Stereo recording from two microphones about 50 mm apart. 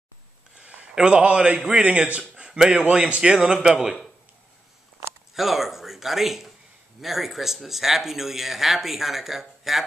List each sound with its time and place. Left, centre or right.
0.6 s a man's voice: right
3.2 s a man's voice: centre
5.3 s speech: centre